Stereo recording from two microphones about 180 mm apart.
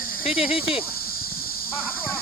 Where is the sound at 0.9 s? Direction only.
55° left (ahead or behind).